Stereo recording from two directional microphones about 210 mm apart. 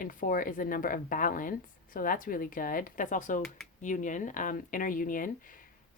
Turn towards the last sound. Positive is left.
turn(degrees=40)  # may be behind; listen again after turning